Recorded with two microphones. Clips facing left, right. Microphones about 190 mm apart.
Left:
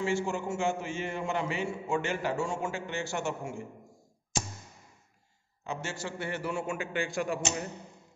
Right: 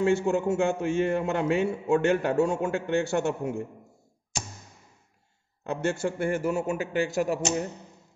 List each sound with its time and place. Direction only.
0.0 s a man's voice: 60° right (ahead or behind)
5.6 s a man's voice: 60° right (ahead or behind); by 7.6 s 40° right (ahead or behind)